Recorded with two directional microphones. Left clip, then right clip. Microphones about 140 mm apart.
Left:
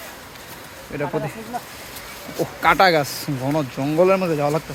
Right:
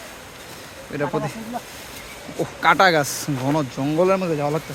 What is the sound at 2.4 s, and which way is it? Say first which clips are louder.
Speech: even; 5° right (ahead or behind).